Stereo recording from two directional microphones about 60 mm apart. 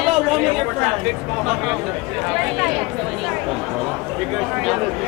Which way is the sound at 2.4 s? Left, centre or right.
Centre.